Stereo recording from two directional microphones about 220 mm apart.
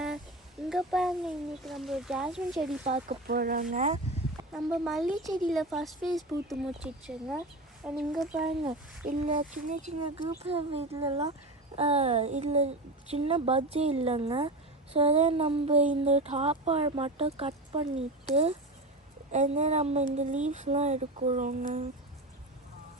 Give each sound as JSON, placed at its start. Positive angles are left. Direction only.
{"t": 0.7, "sound": "speech", "side_deg": 0}
{"t": 2.8, "sound": "a child's voice", "side_deg": -30}
{"t": 3.2, "sound": "speech", "side_deg": -40}
{"t": 4.5, "sound": "speech", "side_deg": -5}
{"t": 9.0, "sound": "a child's voice", "side_deg": -35}